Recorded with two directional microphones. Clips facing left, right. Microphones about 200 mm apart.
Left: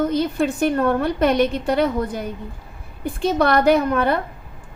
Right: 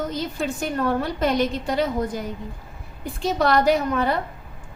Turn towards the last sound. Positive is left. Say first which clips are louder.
# left 4 dB
turn(degrees=60)  # may be behind; listen again after turning